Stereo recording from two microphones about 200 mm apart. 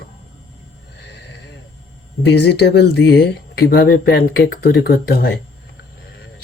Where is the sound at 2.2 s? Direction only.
60° left (ahead or behind).